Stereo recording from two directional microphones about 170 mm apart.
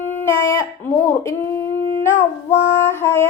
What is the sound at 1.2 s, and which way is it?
Humming, 15° left (ahead or behind).